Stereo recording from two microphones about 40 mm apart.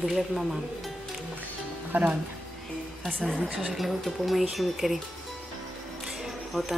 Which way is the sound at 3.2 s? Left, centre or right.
Centre.